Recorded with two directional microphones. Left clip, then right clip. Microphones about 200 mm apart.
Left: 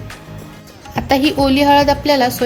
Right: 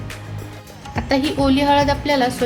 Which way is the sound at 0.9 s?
35° left (ahead or behind).